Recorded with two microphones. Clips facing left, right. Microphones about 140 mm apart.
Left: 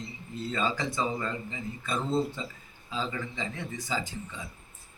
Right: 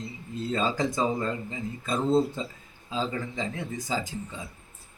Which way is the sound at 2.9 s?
45° right (ahead or behind).